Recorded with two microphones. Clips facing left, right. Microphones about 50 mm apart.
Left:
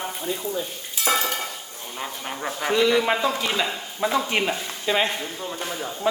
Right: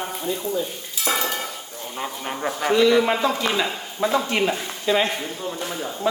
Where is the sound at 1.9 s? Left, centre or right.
Centre.